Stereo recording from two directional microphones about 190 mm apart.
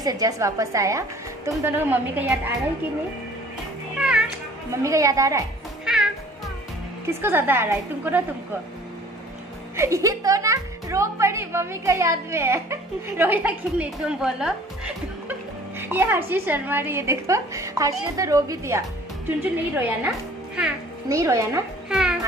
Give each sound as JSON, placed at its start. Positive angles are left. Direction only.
{"t": 0.0, "sound": "a woman's voice", "side_deg": -20}
{"t": 4.0, "sound": "music", "side_deg": -5}
{"t": 4.8, "sound": "a woman's voice", "side_deg": -15}
{"t": 7.2, "sound": "a woman's voice", "side_deg": -10}
{"t": 9.8, "sound": "a woman's voice", "side_deg": -15}
{"t": 15.8, "sound": "a woman's voice", "side_deg": -10}
{"t": 21.1, "sound": "a woman's voice", "side_deg": -15}
{"t": 21.8, "sound": "a child's voice", "side_deg": -5}